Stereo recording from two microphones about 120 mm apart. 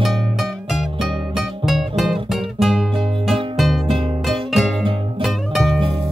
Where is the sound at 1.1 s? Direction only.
45° right (ahead or behind).